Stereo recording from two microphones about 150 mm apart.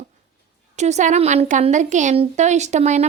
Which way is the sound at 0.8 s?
50° right (ahead or behind).